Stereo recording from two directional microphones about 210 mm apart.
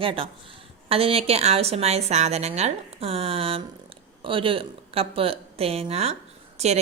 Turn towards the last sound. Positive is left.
turn(degrees=-30)  # may be behind; listen again after turning